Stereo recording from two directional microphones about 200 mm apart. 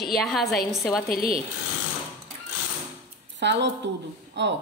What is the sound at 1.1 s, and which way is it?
Speech, 45° left (ahead or behind).